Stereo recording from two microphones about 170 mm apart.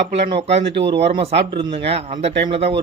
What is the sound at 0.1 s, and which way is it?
Speech, 35° right (ahead or behind).